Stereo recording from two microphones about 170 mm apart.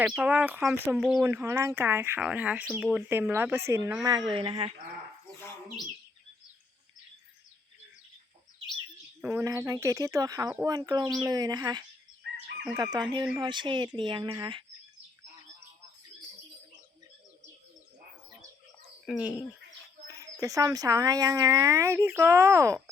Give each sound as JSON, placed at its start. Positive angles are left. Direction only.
{"t": 0.1, "sound": "speech", "side_deg": -5}
{"t": 1.2, "sound": "speech", "side_deg": -15}
{"t": 9.2, "sound": "speech", "side_deg": -15}
{"t": 19.0, "sound": "speech", "side_deg": -5}
{"t": 20.4, "sound": "speech", "side_deg": -20}